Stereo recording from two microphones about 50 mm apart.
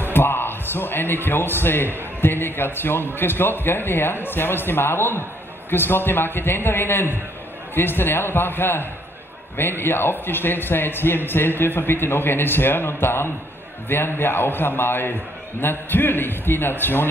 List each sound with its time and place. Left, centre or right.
0.1 s a man's voice: left